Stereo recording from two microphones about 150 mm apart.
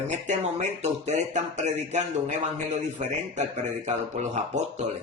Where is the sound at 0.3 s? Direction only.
50° right (ahead or behind).